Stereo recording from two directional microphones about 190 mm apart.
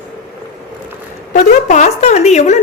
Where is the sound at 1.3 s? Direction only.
40° left (ahead or behind).